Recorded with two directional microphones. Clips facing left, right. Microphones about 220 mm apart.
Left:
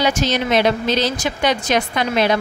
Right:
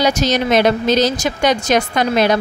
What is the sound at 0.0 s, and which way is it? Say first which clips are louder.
Speech: right 3 dB; 40° right (ahead or behind).